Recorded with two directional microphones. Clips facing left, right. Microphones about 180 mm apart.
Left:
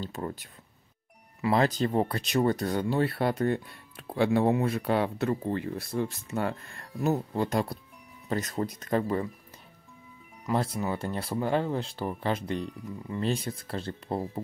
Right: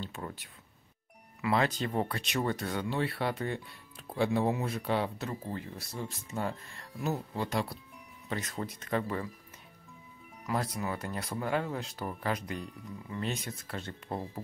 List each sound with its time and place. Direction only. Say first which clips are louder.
0.0 s speech: left 6 dB; 40° left (ahead or behind)
4.1 s speech: left 5 dB; 65° left (ahead or behind); by 9.3 s 35° left (ahead or behind)
10.4 s speech: left 5 dB; 25° left (ahead or behind)